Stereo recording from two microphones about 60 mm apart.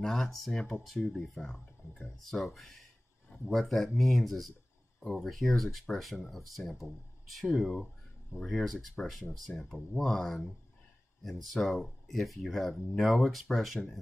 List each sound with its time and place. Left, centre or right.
0.0 s speech: centre
7.7 s a sound: centre
8.4 s speech: centre